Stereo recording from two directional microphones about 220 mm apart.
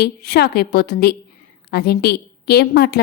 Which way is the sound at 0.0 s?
45° left (ahead or behind).